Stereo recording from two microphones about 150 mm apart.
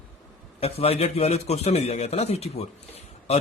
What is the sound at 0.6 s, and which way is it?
A man's voice, 40° left (ahead or behind).